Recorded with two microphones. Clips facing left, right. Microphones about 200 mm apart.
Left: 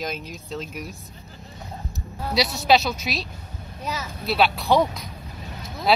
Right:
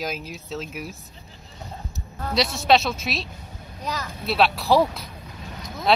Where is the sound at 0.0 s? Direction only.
5° right (ahead or behind).